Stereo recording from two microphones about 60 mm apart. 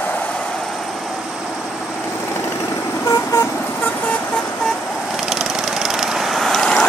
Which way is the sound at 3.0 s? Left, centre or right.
Left.